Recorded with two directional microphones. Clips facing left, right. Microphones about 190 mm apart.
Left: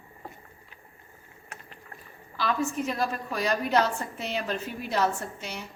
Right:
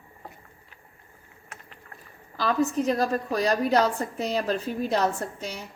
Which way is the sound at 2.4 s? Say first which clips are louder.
Right 4 dB; 35° right (ahead or behind).